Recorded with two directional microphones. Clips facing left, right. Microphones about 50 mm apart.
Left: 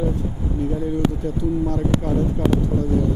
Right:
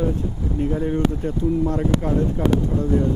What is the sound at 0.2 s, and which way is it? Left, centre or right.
Speech, right.